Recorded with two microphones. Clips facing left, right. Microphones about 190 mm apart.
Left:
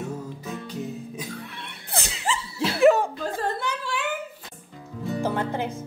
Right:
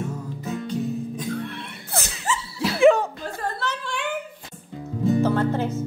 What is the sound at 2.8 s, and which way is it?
Chuckle, 5° left (ahead or behind).